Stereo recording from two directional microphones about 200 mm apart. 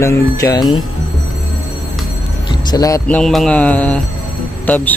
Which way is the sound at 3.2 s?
5° left (ahead or behind).